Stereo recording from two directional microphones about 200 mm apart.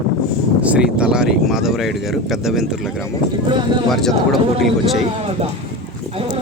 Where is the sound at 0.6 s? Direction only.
5° right (ahead or behind).